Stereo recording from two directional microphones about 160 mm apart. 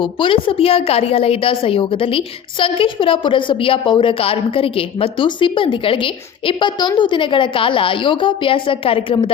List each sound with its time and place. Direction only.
0.0 s a woman's voice: 30° left (ahead or behind)